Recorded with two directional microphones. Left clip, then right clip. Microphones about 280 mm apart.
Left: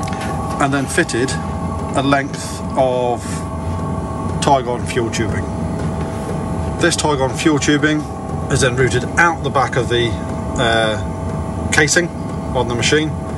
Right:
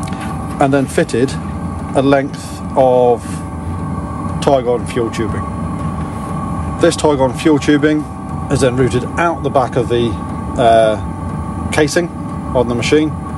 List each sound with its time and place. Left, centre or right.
0.6 s a man's voice: centre
4.5 s speech: centre
6.8 s a man's voice: centre